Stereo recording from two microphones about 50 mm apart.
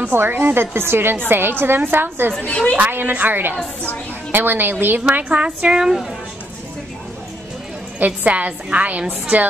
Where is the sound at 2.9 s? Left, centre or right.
Right.